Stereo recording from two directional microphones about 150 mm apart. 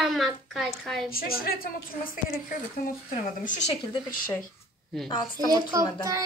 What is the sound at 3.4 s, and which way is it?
Speech, 50° left (ahead or behind).